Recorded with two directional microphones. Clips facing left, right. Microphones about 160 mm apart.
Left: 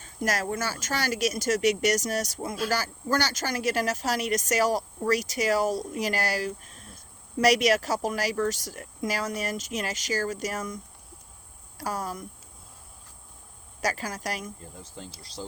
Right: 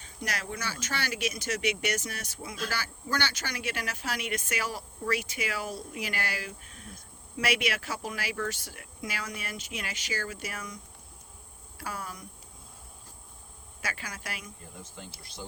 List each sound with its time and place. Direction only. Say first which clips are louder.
0.0 s speech: left 8 dB; 45° left (ahead or behind)
11.8 s speech: left 7 dB; 40° left (ahead or behind)
13.8 s speech: left 9 dB; 40° left (ahead or behind)